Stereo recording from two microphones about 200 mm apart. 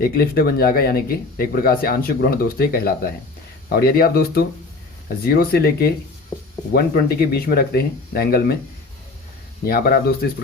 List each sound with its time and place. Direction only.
0.0 s speech: 50° left (ahead or behind)
9.6 s speech: 50° left (ahead or behind)